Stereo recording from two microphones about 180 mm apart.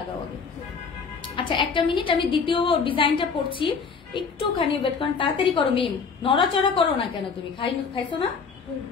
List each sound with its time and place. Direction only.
1.2 s music: 30° left (ahead or behind)
1.7 s a woman's voice: 30° left (ahead or behind)